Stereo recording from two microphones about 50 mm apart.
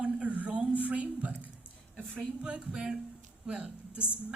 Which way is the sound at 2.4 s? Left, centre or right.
Centre.